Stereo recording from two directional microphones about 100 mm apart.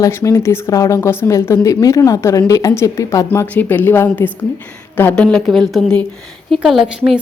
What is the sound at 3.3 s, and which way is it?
A woman's voice, 20° left (ahead or behind).